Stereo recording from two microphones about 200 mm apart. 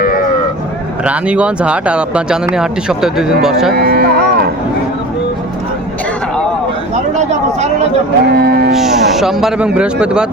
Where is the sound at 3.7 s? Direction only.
50° right (ahead or behind).